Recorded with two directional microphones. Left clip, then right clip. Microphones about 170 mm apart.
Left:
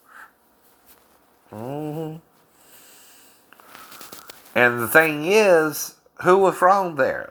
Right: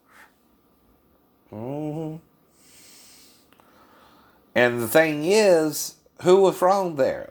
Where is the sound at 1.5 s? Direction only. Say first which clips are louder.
Left 1 dB; 15° left (ahead or behind).